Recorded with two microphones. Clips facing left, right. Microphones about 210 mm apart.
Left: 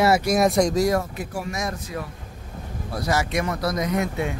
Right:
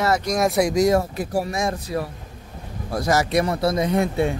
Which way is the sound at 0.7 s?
20° right (ahead or behind).